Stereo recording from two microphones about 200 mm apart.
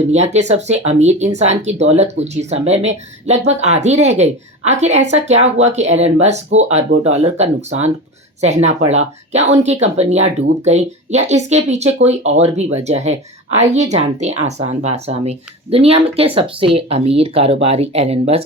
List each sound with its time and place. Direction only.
0.1 s speech: 35° right (ahead or behind)